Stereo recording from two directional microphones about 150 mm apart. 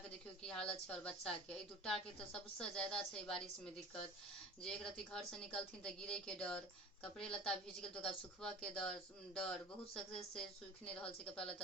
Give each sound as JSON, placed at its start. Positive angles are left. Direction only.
{"t": 0.4, "sound": "a woman's voice", "side_deg": 5}